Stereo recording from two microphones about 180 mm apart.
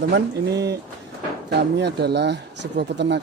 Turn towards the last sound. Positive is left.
turn(degrees=-70)  # may be behind; listen again after turning